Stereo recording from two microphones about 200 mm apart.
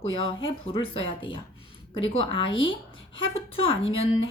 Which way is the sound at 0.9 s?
25° left (ahead or behind).